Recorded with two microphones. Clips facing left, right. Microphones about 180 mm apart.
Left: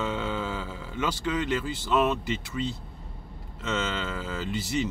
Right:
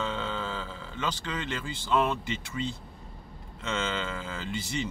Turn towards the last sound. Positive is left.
turn(degrees=5)  # may be behind; listen again after turning